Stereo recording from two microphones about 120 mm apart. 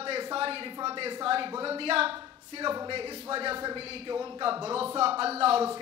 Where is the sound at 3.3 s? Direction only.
50° right (ahead or behind).